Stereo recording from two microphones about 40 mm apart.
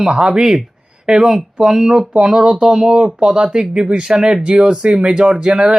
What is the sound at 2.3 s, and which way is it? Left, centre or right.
Speech, right.